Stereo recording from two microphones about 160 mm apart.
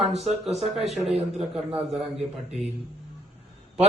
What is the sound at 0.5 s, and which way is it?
Speech, centre (ahead or behind).